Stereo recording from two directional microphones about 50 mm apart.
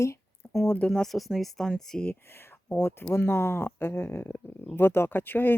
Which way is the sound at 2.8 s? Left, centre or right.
Left.